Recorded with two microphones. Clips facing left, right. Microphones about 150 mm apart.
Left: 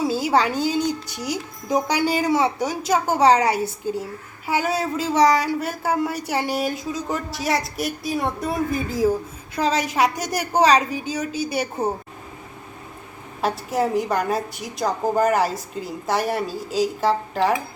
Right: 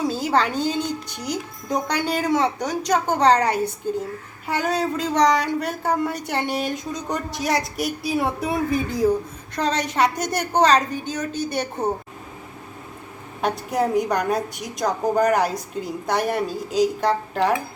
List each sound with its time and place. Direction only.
0.0 s a sound: 5° left (ahead or behind)
1.0 s a woman's voice: 10° left (ahead or behind)
13.4 s speech: centre (ahead or behind)